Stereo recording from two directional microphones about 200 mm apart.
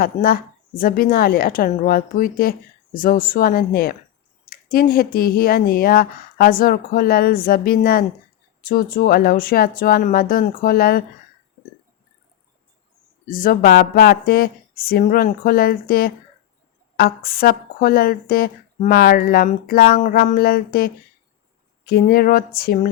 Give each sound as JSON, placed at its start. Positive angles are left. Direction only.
{"t": 0.0, "sound": "a woman's voice", "side_deg": 45}
{"t": 13.2, "sound": "a woman's voice", "side_deg": 45}